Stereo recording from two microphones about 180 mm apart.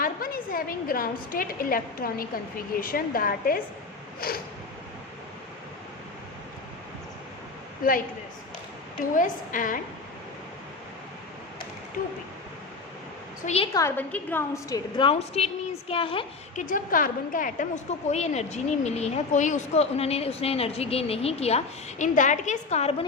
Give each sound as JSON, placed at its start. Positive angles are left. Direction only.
{"t": 0.0, "sound": "a woman's voice", "side_deg": 50}
{"t": 4.2, "sound": "a sound", "side_deg": 55}
{"t": 7.8, "sound": "a woman's voice", "side_deg": 50}
{"t": 9.1, "sound": "a woman's voice", "side_deg": 45}
{"t": 12.0, "sound": "a woman's voice", "side_deg": 50}
{"t": 13.4, "sound": "a woman's voice", "side_deg": 35}
{"t": 13.7, "sound": "a woman's voice", "side_deg": 15}
{"t": 16.6, "sound": "a woman's voice", "side_deg": 50}